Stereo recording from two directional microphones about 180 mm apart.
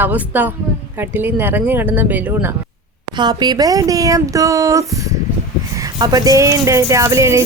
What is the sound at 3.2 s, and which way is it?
Speech, 25° right (ahead or behind).